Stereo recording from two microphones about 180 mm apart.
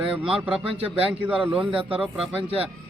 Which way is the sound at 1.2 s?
10° right (ahead or behind).